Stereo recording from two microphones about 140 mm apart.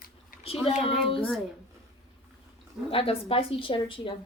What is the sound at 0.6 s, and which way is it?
Speech, 45° left (ahead or behind).